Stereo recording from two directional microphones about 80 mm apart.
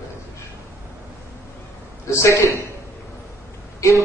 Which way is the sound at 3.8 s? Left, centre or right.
Left.